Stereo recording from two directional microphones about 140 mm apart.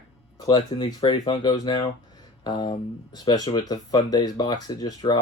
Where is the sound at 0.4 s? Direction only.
30° left (ahead or behind).